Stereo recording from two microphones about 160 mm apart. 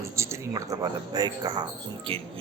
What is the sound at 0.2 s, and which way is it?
Speech, 15° right (ahead or behind).